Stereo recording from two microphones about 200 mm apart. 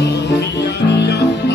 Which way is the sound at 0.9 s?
55° left (ahead or behind).